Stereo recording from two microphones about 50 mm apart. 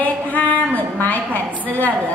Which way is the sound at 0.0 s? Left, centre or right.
Left.